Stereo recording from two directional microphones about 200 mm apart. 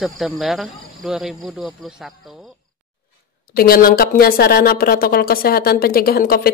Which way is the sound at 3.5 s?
45° left (ahead or behind).